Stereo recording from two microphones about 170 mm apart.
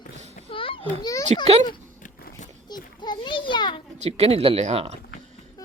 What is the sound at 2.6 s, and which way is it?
Children playing, 25° left (ahead or behind).